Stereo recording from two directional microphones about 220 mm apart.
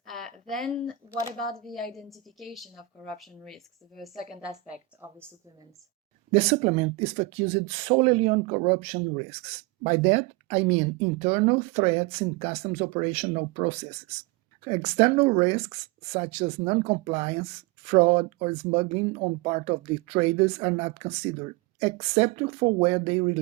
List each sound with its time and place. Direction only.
0.0 s a sound: centre (ahead or behind)
1.6 s a woman's voice: centre (ahead or behind)
6.3 s speech: 30° right (ahead or behind)